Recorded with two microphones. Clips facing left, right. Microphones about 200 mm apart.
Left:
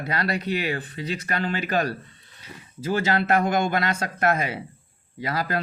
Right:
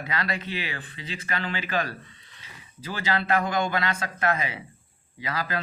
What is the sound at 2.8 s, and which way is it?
Speech, 45° left (ahead or behind).